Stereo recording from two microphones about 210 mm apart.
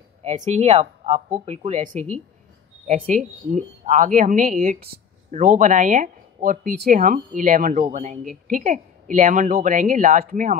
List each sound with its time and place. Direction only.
0.2 s speech: 35° right (ahead or behind)